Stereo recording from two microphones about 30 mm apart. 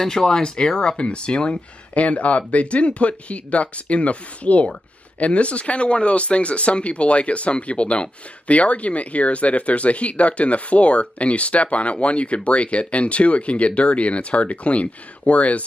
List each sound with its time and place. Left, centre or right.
0.0 s speech: centre
2.0 s speech: left